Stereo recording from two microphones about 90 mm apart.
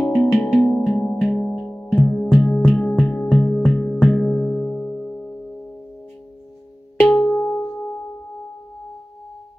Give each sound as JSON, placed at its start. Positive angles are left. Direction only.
{"t": 0.0, "sound": "music", "side_deg": 5}
{"t": 2.6, "sound": "music", "side_deg": 0}
{"t": 3.0, "sound": "music", "side_deg": 10}
{"t": 7.1, "sound": "singing bowl", "side_deg": 15}